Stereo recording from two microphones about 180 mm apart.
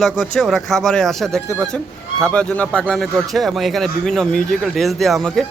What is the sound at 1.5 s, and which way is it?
Speech, 15° right (ahead or behind).